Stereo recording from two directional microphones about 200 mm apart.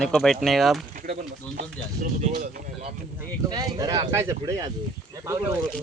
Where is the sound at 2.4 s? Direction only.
35° right (ahead or behind).